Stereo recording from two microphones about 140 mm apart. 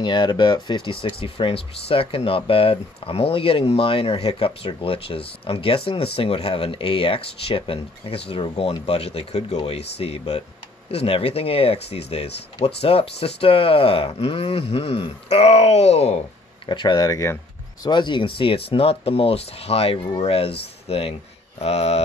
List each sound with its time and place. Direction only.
0.0 s speech: 35° left (ahead or behind)
16.6 s speech: 35° left (ahead or behind)
17.8 s speech: 35° left (ahead or behind); by 22.0 s 50° left (ahead or behind)